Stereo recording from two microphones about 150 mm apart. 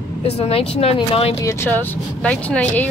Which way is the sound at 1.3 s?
15° left (ahead or behind).